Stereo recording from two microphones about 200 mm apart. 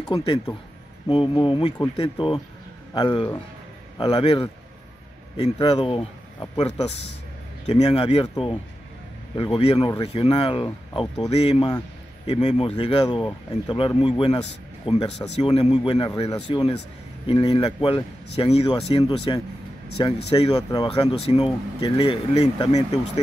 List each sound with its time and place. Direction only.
1.0 s a man's voice: 25° left (ahead or behind)